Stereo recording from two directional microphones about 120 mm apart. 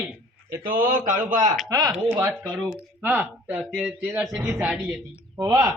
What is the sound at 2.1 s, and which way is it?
Speech, 20° right (ahead or behind).